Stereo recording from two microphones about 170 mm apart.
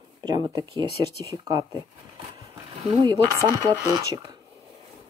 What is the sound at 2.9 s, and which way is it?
Speech, 25° right (ahead or behind).